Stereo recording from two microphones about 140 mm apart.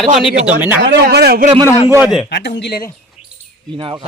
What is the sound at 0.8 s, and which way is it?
Speech, 90° right.